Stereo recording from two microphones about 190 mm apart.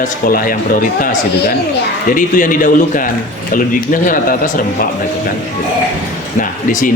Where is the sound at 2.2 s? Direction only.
45° left (ahead or behind).